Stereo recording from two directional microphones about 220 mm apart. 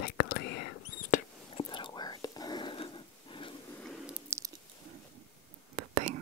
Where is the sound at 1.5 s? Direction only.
20° left (ahead or behind).